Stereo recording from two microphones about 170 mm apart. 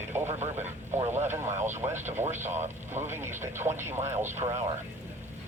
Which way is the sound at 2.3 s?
45° right (ahead or behind).